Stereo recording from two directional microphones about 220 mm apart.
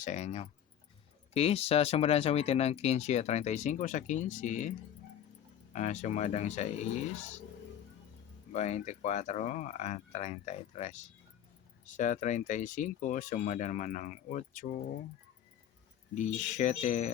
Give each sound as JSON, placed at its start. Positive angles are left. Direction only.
{"t": 0.0, "sound": "speech", "side_deg": 30}
{"t": 5.7, "sound": "speech", "side_deg": 30}
{"t": 8.5, "sound": "speech", "side_deg": 30}
{"t": 16.1, "sound": "speech", "side_deg": 35}